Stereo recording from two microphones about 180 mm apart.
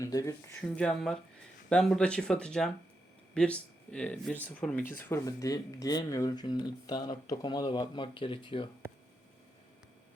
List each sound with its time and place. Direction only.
0.0 s speech: 20° left (ahead or behind)
0.8 s speech: 5° left (ahead or behind); by 8.7 s 25° left (ahead or behind)